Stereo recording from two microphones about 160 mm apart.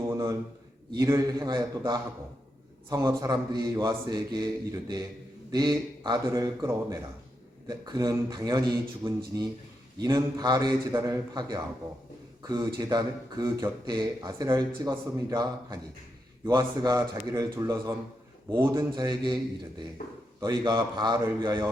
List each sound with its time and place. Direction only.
0.0 s a sound: 20° right (ahead or behind)
0.9 s a man's voice: 25° right (ahead or behind)
18.9 s speech: 30° right (ahead or behind)
20.4 s speech: 25° right (ahead or behind)